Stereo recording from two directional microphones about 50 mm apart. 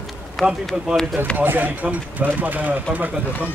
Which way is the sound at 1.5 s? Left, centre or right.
Right.